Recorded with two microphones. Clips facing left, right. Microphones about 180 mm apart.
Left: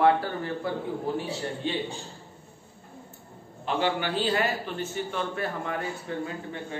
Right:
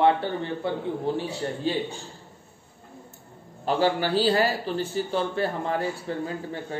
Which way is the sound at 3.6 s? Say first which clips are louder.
Right 4 dB; 35° right (ahead or behind).